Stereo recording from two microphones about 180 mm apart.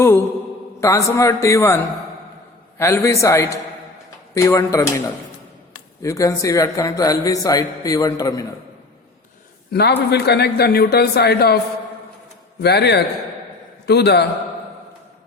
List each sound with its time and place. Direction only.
0.0 s a man's voice: 15° left (ahead or behind)
6.0 s a man's voice: 20° left (ahead or behind)
9.7 s a man's voice: 65° left (ahead or behind)
12.6 s a man's voice: 65° left (ahead or behind)